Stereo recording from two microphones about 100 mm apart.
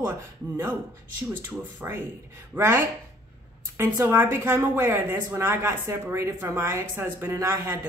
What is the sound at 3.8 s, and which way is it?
A woman's voice, 25° right (ahead or behind).